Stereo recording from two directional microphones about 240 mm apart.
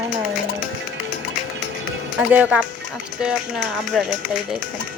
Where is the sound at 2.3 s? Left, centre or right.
Centre.